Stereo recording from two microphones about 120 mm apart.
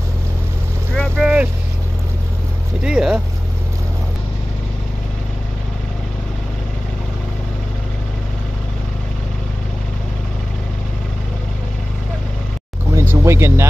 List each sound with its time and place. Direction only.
0.9 s vehicle: 5° left (ahead or behind)
1.2 s vehicle: 10° right (ahead or behind)
2.8 s speech: 5° right (ahead or behind)
12.9 s a sound: 20° right (ahead or behind)